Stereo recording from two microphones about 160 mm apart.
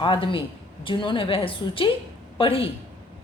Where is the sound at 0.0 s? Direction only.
30° left (ahead or behind).